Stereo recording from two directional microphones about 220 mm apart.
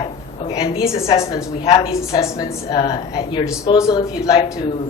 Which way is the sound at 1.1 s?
15° left (ahead or behind).